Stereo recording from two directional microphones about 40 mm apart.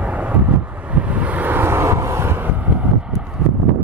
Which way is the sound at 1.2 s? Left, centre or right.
Right.